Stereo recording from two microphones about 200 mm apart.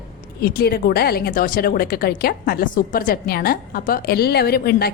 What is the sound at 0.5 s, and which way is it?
Speech, 50° left (ahead or behind).